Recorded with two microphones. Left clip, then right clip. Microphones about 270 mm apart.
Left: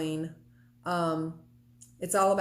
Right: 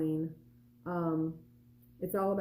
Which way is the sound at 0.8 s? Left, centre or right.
Centre.